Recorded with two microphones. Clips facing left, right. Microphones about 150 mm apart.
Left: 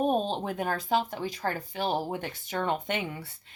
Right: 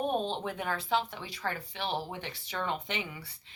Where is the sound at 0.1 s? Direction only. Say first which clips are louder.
Left 4 dB; 40° left (ahead or behind).